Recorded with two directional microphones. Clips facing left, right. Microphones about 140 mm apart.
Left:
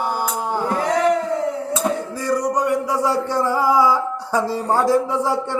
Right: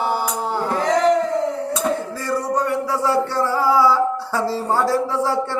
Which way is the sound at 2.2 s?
15° left (ahead or behind).